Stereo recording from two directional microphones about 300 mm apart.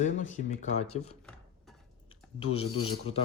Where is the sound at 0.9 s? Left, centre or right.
Left.